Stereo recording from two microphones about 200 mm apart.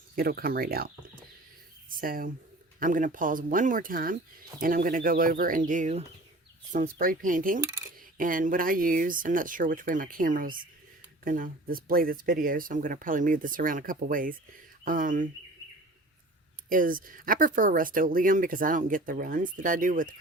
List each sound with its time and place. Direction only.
0.2 s speech: 50° right (ahead or behind)
2.0 s speech: 45° right (ahead or behind)
7.6 s coin: 15° right (ahead or behind)
8.2 s speech: 45° right (ahead or behind)
16.6 s speech: 45° right (ahead or behind)